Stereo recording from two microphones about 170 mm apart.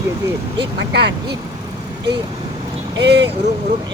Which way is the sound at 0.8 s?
85° right.